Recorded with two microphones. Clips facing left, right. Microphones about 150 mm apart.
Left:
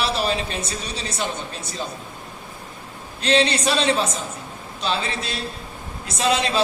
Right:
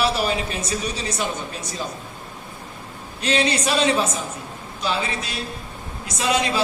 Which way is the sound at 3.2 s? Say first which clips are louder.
Left 2 dB; 30° left (ahead or behind).